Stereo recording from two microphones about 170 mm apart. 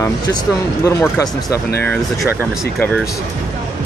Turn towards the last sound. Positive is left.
turn(degrees=5)  # may be behind; listen again after turning